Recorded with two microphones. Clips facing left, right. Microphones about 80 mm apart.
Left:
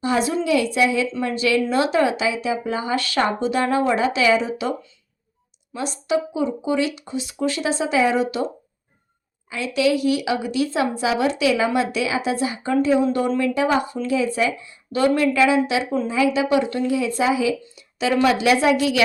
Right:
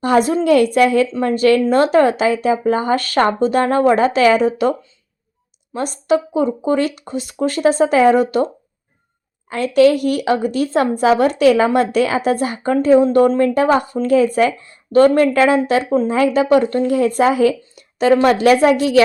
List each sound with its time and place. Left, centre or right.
0.0 s a woman's voice: right
5.7 s a woman's voice: right
9.5 s a woman's voice: right